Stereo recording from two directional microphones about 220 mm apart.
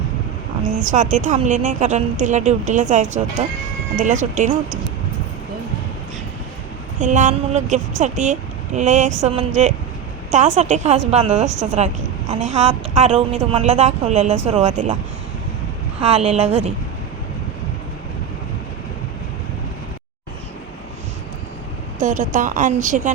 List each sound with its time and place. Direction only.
0.6 s a woman's voice: 35° right (ahead or behind)
7.0 s a woman's voice: 35° right (ahead or behind)
16.0 s a woman's voice: 30° right (ahead or behind)
22.0 s a woman's voice: 35° right (ahead or behind)